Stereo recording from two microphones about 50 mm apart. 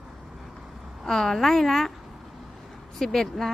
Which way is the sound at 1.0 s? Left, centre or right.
Centre.